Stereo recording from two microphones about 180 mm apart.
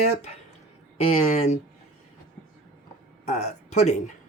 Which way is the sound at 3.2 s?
40° left (ahead or behind).